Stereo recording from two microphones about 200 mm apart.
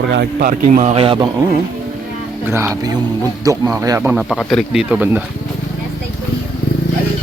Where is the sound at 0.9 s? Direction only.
25° right (ahead or behind).